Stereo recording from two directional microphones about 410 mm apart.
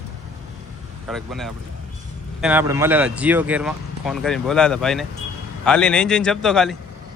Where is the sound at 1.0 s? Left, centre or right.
Centre.